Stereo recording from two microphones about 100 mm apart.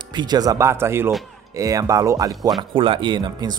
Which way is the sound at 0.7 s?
25° right (ahead or behind).